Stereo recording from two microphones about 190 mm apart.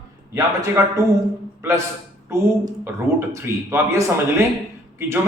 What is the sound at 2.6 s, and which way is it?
A man's voice, 15° right (ahead or behind).